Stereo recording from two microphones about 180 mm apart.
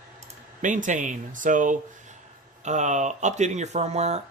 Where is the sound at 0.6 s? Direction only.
45° right (ahead or behind).